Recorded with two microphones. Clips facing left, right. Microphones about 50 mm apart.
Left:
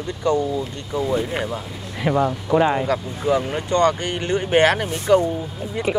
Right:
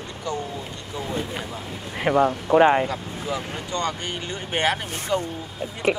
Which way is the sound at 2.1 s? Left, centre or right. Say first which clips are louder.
Even; centre.